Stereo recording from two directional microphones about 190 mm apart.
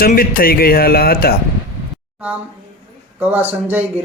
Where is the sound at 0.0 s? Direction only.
50° left (ahead or behind).